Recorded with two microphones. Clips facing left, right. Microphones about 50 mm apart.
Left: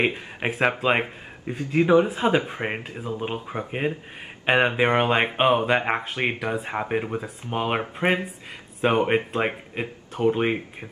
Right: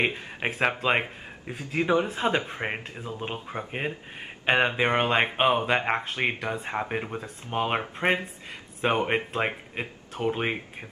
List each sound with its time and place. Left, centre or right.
0.0 s speech: centre
2.9 s speech: centre
3.2 s speech: centre